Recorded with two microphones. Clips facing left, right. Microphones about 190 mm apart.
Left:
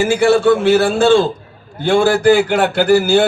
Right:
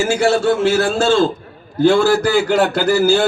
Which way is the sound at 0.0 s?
55° left (ahead or behind).